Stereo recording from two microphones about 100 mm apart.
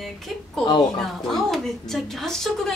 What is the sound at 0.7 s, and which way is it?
Speech, 50° left (ahead or behind).